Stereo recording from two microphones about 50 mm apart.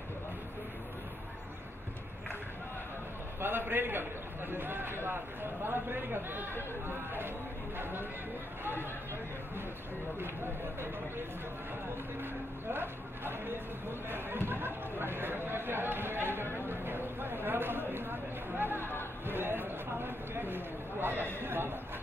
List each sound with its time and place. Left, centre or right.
3.3 s a man's voice: right
7.7 s a man's voice: right
12.7 s speech: right
16.6 s a sound: right
21.0 s a man's voice: right